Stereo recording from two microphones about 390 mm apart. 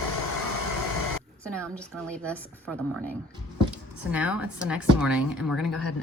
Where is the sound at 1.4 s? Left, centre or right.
Centre.